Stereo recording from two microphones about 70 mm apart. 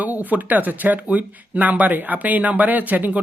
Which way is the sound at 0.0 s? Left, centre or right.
Right.